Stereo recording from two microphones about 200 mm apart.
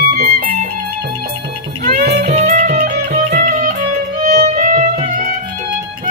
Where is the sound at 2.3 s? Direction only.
35° right (ahead or behind).